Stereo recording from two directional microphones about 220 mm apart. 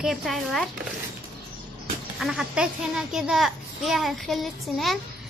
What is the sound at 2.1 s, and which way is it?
A child's voice, centre (ahead or behind).